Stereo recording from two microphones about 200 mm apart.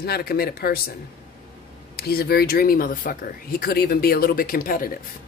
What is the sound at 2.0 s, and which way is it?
Speech, 50° left (ahead or behind).